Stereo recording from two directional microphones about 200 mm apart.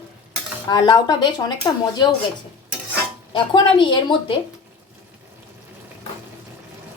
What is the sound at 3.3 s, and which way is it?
A woman's voice, 25° left (ahead or behind).